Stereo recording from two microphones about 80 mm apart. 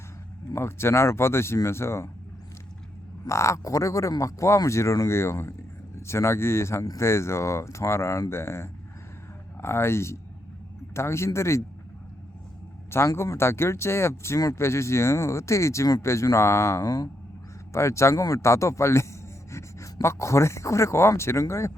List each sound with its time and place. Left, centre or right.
0.5 s speech: left
3.2 s speech: left
12.9 s speech: left